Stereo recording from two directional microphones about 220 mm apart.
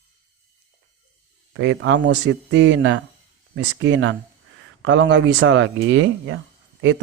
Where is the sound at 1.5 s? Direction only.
60° right (ahead or behind).